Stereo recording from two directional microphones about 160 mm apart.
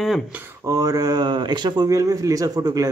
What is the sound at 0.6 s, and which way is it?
Speech, 20° right (ahead or behind).